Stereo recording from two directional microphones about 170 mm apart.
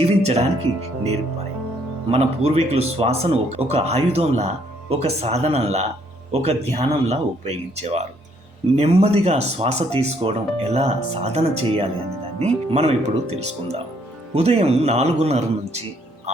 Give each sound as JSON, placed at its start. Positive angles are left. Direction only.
{"t": 0.0, "sound": "music", "side_deg": -40}
{"t": 2.0, "sound": "speech", "side_deg": -35}